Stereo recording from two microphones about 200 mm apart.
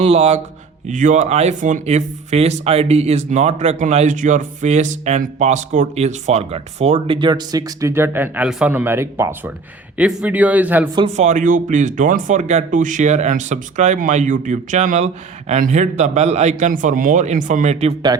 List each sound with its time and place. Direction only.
0.0 s a man's voice: 30° right (ahead or behind); by 10.8 s 10° right (ahead or behind)
10.9 s speech: 30° right (ahead or behind)